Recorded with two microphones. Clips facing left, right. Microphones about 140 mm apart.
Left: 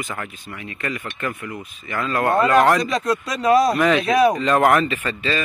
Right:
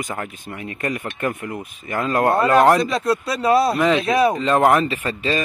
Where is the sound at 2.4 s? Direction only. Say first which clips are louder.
Right 1 dB; 30° right (ahead or behind).